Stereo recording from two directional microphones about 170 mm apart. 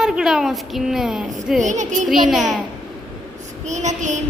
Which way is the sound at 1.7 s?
45° right (ahead or behind).